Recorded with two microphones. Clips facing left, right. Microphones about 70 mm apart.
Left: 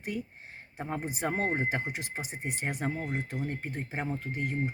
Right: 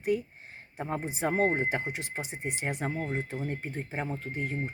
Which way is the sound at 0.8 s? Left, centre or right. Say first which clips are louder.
Right 2 dB; centre.